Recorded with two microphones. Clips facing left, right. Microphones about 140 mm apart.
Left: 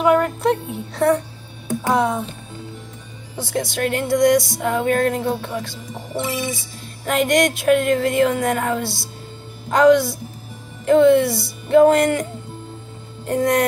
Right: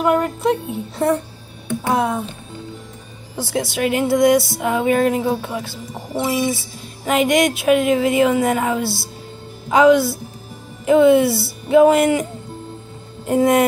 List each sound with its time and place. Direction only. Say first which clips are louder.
0.0 s speech: left 1 dB; centre (ahead or behind)
3.3 s speech: right 2 dB; 5° right (ahead or behind)
6.1 s speech: right 5 dB; 45° right (ahead or behind)
6.5 s speech: right 4 dB; 5° right (ahead or behind)
13.3 s speech: right 3 dB; 5° right (ahead or behind)